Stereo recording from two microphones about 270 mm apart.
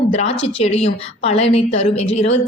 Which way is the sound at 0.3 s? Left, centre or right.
Left.